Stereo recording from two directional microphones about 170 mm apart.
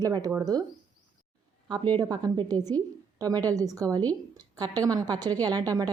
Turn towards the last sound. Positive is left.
turn(degrees=-20)  # may be behind; listen again after turning